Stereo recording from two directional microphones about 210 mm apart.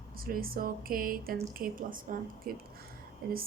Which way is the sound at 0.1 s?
45° right (ahead or behind).